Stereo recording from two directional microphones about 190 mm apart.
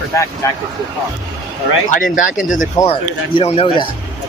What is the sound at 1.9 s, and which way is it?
Speech, 45° left (ahead or behind).